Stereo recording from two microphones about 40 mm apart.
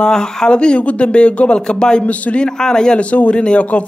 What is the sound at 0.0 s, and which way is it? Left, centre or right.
Speech, centre.